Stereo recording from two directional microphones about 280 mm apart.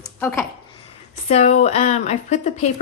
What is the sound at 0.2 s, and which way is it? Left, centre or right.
Speech, centre.